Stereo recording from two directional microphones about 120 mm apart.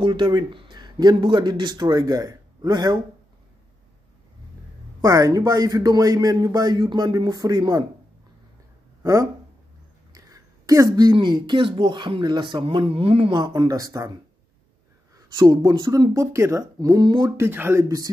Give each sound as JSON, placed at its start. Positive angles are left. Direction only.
{"t": 0.0, "sound": "a man's voice", "side_deg": -40}
{"t": 5.0, "sound": "speech", "side_deg": -30}
{"t": 9.0, "sound": "speech", "side_deg": -25}
{"t": 15.4, "sound": "speech", "side_deg": -40}
{"t": 17.4, "sound": "speech", "side_deg": -20}